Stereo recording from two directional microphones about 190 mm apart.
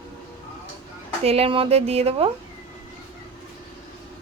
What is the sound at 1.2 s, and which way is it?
Speech, 30° right (ahead or behind).